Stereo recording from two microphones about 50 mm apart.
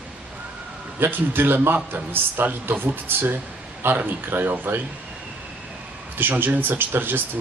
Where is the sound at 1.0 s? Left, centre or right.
Right.